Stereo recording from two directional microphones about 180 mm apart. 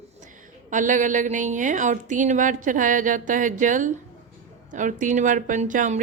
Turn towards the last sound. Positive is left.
turn(degrees=-45)  # may be behind; listen again after turning